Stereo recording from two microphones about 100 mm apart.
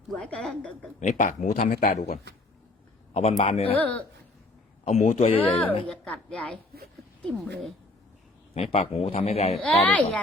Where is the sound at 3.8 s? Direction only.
15° left (ahead or behind).